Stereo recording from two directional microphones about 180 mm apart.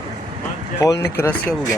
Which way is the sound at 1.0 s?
15° left (ahead or behind).